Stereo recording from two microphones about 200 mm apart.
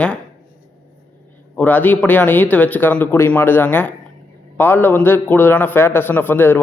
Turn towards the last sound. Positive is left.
turn(degrees=10)  # may be behind; listen again after turning